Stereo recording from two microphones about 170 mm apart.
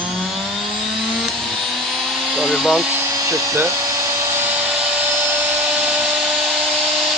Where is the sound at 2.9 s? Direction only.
15° right (ahead or behind).